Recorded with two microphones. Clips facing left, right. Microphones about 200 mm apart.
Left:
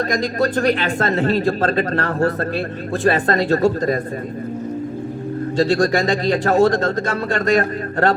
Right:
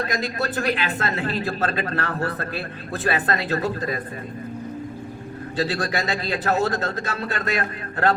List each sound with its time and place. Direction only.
0.2 s speech: 40° left (ahead or behind)
5.5 s speech: 45° left (ahead or behind)